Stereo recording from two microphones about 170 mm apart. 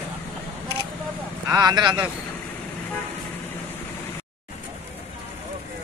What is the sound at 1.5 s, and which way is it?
Speech, 25° right (ahead or behind).